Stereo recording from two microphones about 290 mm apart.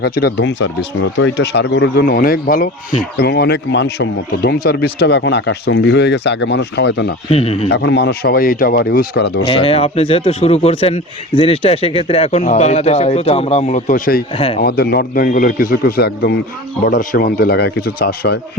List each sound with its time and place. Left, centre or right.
0.0 s speech: left
7.3 s speech: left
7.7 s speech: left
9.5 s speech: centre
14.3 s speech: centre
14.6 s speech: left